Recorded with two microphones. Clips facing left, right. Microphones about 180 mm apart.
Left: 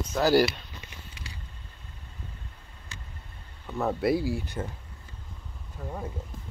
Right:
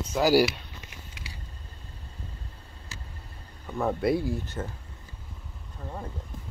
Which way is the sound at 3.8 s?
Centre (ahead or behind).